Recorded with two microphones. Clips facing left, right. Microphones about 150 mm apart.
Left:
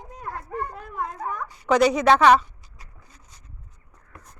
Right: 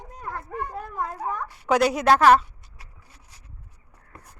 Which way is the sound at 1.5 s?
5° right (ahead or behind).